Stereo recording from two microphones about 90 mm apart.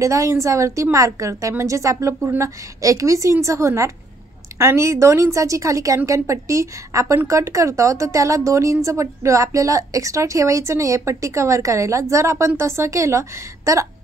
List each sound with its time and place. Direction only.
0.0 s speech: 35° right (ahead or behind)